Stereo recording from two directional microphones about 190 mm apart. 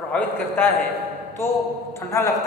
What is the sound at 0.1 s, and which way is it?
Speech, 10° left (ahead or behind).